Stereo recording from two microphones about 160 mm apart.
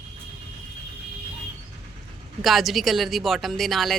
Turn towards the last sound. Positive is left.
turn(degrees=0)  # may be behind; listen again after turning